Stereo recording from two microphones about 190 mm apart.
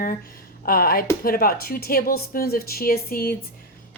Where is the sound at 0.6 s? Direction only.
50° left (ahead or behind).